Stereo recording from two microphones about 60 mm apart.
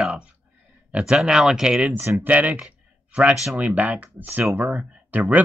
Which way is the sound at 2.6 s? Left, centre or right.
Right.